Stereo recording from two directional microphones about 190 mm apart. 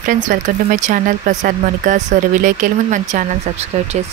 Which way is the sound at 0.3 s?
40° right (ahead or behind).